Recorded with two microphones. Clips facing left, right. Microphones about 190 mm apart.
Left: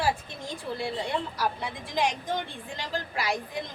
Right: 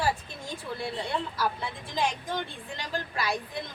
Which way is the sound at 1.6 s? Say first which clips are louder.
Left 2 dB; 15° left (ahead or behind).